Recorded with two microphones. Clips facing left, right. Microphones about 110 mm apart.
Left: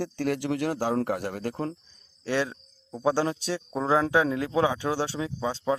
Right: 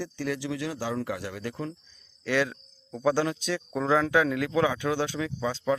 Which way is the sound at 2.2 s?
30° left (ahead or behind).